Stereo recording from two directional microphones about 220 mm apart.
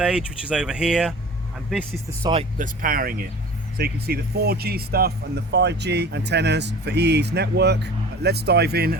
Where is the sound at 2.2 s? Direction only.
25° right (ahead or behind).